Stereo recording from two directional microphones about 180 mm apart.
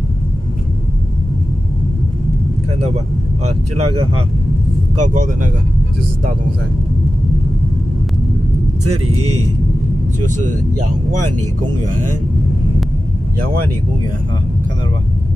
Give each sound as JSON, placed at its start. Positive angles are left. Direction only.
{"t": 3.4, "sound": "speech", "side_deg": -35}
{"t": 5.0, "sound": "speech", "side_deg": -45}
{"t": 10.2, "sound": "speech", "side_deg": -45}